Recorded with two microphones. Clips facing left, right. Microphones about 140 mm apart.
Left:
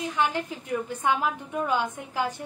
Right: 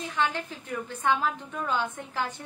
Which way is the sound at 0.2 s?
10° left (ahead or behind).